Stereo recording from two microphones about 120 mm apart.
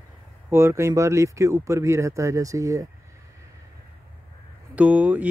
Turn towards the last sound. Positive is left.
turn(degrees=-15)  # may be behind; listen again after turning